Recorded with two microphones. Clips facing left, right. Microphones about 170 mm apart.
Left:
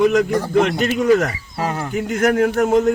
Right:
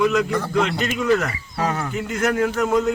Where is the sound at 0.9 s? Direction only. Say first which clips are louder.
Left 5 dB; 45° left (ahead or behind).